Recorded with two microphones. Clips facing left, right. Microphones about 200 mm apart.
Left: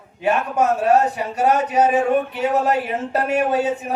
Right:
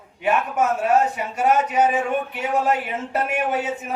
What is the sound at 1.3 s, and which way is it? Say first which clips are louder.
A man's voice: left 2 dB; 40° left (ahead or behind).